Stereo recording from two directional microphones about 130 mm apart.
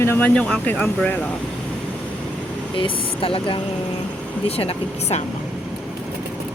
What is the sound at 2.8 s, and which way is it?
Speech, 45° left (ahead or behind).